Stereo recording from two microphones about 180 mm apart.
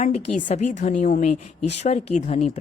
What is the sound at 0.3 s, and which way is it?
Speech, 45° left (ahead or behind).